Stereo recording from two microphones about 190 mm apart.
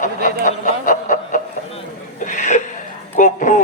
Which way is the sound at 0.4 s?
45° left (ahead or behind).